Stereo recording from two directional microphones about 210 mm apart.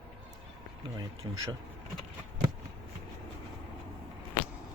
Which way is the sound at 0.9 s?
15° right (ahead or behind).